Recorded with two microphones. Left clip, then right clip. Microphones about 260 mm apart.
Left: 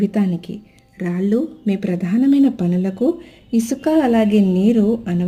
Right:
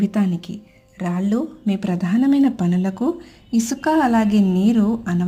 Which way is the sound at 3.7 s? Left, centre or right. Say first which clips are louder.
Left 1 dB; right.